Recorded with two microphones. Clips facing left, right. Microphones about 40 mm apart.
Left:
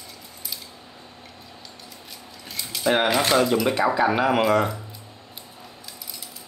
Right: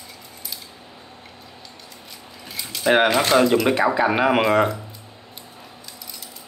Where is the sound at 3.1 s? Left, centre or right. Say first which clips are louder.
Right 3 dB; centre.